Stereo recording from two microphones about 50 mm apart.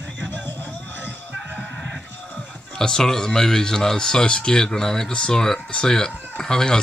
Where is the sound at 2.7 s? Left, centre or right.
Centre.